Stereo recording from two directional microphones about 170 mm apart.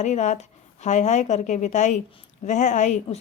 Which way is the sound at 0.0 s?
45° left (ahead or behind).